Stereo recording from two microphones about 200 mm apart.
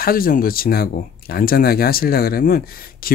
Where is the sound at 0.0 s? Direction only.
45° left (ahead or behind).